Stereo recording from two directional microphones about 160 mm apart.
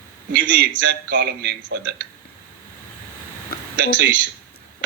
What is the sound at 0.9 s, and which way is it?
Speech, 90° right.